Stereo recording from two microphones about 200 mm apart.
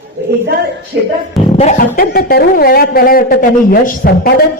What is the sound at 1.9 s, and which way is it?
A man's voice, 50° left (ahead or behind).